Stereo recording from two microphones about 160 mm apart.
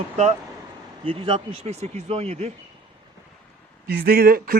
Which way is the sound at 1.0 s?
35° right (ahead or behind).